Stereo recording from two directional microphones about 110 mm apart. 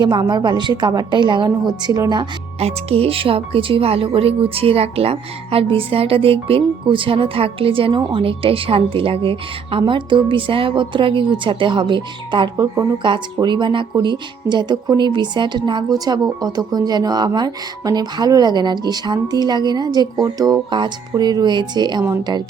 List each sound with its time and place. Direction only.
0.0 s a woman's voice: 45° right (ahead or behind)
2.6 s a woman's voice: 65° right (ahead or behind); by 22.4 s 40° right (ahead or behind)